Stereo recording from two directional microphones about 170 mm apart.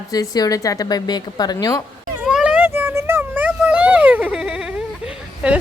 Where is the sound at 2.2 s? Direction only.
5° right (ahead or behind).